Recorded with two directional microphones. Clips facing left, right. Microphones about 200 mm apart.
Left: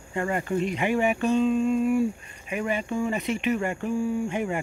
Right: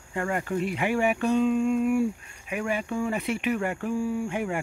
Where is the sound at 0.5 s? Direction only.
10° right (ahead or behind).